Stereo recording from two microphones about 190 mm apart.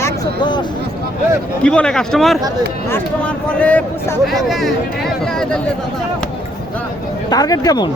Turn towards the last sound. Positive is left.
turn(degrees=20)  # may be behind; listen again after turning